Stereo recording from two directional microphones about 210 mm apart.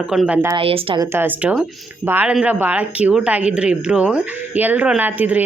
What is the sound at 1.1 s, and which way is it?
Speech, 10° right (ahead or behind).